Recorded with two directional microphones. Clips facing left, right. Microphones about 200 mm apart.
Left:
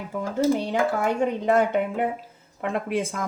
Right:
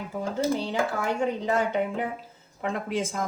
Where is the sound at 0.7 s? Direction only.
55° left (ahead or behind).